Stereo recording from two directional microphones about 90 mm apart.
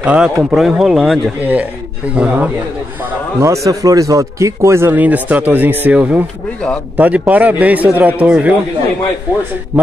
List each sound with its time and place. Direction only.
0.0 s a man's voice: 15° right (ahead or behind)
1.4 s a man's voice: 15° right (ahead or behind)
3.3 s a man's voice: 35° right (ahead or behind); by 8.5 s 15° right (ahead or behind)